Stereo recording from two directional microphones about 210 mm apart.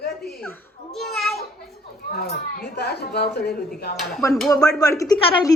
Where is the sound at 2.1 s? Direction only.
45° left (ahead or behind).